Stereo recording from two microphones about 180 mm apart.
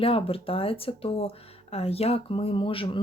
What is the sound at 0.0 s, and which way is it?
Speech, 30° left (ahead or behind).